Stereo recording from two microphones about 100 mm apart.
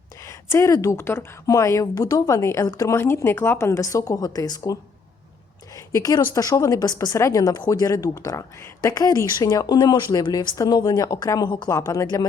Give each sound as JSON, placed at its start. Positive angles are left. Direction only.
{"t": 0.3, "sound": "a woman's voice", "side_deg": 30}
{"t": 3.0, "sound": "a woman's voice", "side_deg": 25}
{"t": 9.7, "sound": "a woman's voice", "side_deg": 45}